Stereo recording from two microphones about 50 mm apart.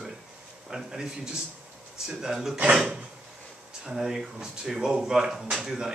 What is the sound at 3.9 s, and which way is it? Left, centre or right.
Speech, centre.